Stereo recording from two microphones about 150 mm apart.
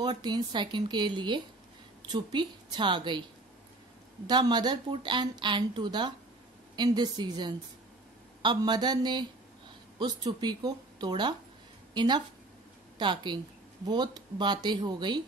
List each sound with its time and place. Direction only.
0.0 s speech: 30° right (ahead or behind)
4.3 s a woman's voice: 30° right (ahead or behind)